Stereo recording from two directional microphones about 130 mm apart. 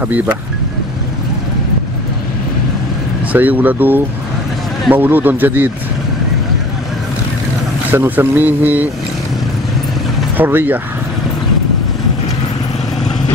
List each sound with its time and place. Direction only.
0.0 s speech: 15° right (ahead or behind)
3.3 s speech: 15° right (ahead or behind)
7.9 s speech: 15° right (ahead or behind)
10.3 s speech: 15° right (ahead or behind)